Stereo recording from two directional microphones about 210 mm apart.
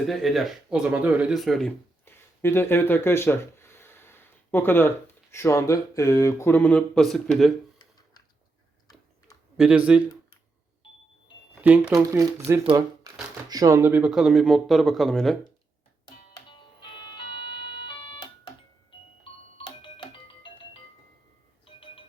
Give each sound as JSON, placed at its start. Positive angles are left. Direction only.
{"t": 0.1, "sound": "speech", "side_deg": 0}
{"t": 9.6, "sound": "speech", "side_deg": -5}
{"t": 11.6, "sound": "speech", "side_deg": -10}
{"t": 13.1, "sound": "a sound", "side_deg": -15}
{"t": 13.5, "sound": "speech", "side_deg": -15}
{"t": 16.0, "sound": "music", "side_deg": 20}
{"t": 21.8, "sound": "music", "side_deg": 25}